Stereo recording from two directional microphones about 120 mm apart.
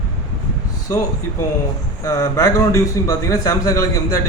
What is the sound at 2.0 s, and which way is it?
A man's voice, 30° left (ahead or behind).